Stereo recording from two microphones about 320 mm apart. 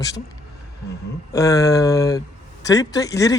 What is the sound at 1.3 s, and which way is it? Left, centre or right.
Speech, centre.